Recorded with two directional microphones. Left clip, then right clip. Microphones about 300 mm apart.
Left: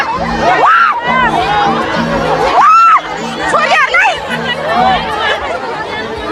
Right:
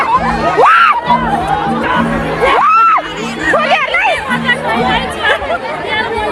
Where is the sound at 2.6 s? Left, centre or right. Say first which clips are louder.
Left 4 dB; centre.